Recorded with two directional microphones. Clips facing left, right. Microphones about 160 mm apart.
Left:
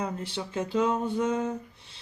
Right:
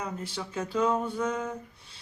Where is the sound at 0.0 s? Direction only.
25° left (ahead or behind).